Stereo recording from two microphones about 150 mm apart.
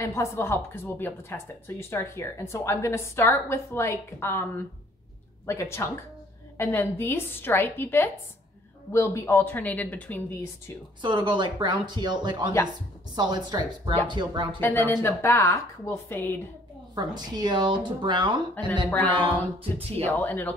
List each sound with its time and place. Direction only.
0.0 s a woman's voice: 20° left (ahead or behind)
5.5 s a woman's voice: 20° left (ahead or behind)
11.0 s speech: 30° right (ahead or behind)
14.6 s a woman's voice: 15° left (ahead or behind)
16.9 s speech: 30° right (ahead or behind)
20.1 s a woman's voice: 10° left (ahead or behind)